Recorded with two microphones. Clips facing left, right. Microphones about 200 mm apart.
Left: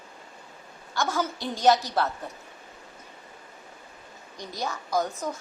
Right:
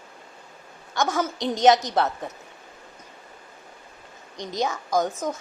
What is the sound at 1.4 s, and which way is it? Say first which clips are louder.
Speech: right 4 dB; 20° right (ahead or behind).